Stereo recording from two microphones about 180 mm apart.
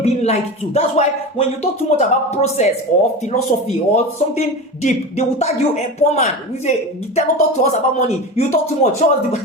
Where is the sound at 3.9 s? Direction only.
40° left (ahead or behind).